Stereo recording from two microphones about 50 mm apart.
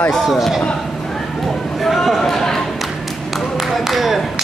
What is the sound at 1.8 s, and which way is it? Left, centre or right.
Speech, centre.